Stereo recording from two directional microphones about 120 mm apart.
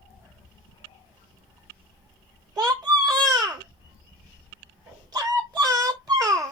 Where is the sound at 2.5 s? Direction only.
30° right (ahead or behind).